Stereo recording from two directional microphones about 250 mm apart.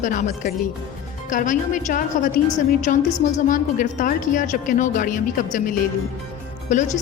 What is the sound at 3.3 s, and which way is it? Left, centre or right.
A woman's voice, left.